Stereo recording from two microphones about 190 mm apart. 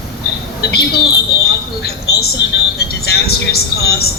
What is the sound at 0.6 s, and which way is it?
A woman's voice, 55° left (ahead or behind).